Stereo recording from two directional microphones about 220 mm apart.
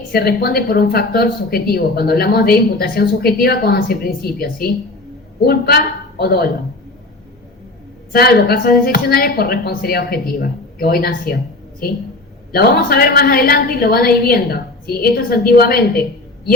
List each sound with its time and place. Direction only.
0.1 s a woman's voice: 45° left (ahead or behind)
8.1 s speech: 45° left (ahead or behind)
12.5 s speech: 45° left (ahead or behind)